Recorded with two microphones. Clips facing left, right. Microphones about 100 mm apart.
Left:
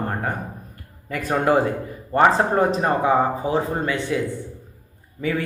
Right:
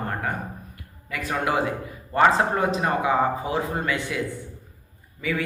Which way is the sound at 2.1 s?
30° left (ahead or behind).